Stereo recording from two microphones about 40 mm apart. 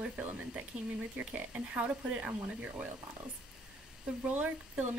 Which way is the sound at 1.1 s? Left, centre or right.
Right.